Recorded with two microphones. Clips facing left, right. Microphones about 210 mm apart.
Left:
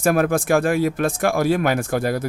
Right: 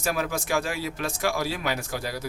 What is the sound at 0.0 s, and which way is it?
A man's voice, 55° left (ahead or behind).